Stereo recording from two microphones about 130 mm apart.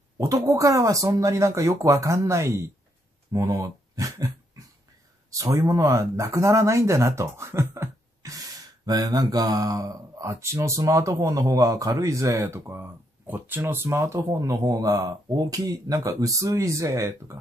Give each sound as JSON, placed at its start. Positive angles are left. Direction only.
{"t": 0.2, "sound": "speech", "side_deg": -25}